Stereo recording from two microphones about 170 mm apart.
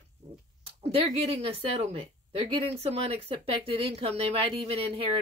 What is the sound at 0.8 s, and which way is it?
A woman's voice, 35° right (ahead or behind).